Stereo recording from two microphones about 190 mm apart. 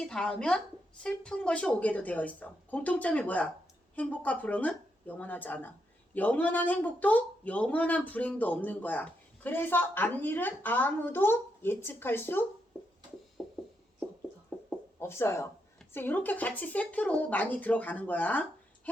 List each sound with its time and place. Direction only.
0.0 s speech: 5° left (ahead or behind)
13.4 s music: centre (ahead or behind)
14.5 s a sound: 10° left (ahead or behind)
14.9 s speech: 15° left (ahead or behind)